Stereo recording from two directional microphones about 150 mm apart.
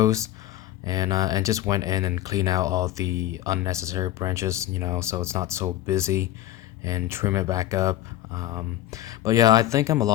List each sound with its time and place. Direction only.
0.0 s speech: 20° right (ahead or behind)